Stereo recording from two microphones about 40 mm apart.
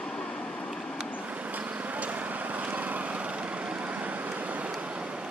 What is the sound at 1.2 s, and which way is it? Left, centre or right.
Vehicle, right.